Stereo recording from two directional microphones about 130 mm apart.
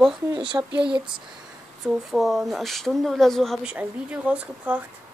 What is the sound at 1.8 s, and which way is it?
Speech, centre (ahead or behind).